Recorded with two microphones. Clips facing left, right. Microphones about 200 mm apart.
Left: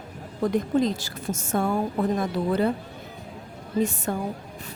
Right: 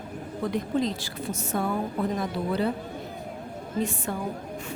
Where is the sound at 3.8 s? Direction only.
45° left (ahead or behind).